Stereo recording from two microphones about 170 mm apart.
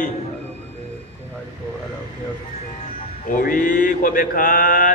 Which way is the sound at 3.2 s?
55° left (ahead or behind).